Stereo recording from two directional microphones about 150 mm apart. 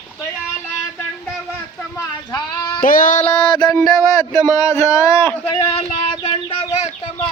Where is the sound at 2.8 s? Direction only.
70° left (ahead or behind).